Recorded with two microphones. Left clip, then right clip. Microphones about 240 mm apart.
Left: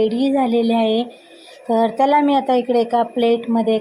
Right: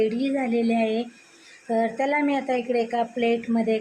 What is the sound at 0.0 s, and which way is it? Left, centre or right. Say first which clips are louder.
A woman's voice: left 7 dB; centre.